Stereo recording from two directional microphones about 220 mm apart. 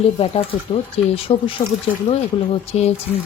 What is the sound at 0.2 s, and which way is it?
Speech, 25° left (ahead or behind).